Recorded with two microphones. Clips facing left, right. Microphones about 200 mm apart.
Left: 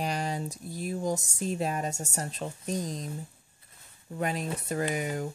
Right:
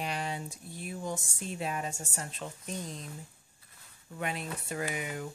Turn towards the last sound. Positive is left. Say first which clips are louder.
# left 5 dB
turn(degrees=40)  # may be behind; listen again after turning